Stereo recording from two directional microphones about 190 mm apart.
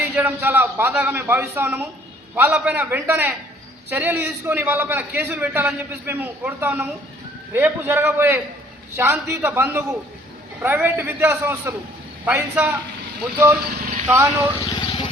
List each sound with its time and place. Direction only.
0.0 s a man's voice: 10° right (ahead or behind)
13.7 s vehicle: 45° right (ahead or behind)
14.6 s vehicle: 25° left (ahead or behind)